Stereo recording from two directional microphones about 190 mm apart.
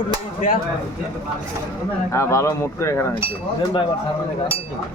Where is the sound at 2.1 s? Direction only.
15° left (ahead or behind).